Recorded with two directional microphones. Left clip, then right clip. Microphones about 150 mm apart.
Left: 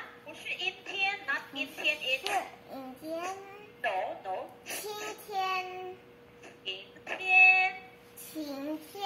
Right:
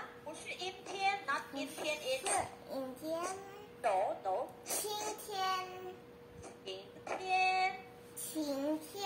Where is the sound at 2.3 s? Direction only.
40° right (ahead or behind).